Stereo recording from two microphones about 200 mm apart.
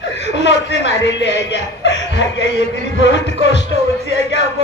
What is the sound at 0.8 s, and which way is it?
Speech, 65° left (ahead or behind).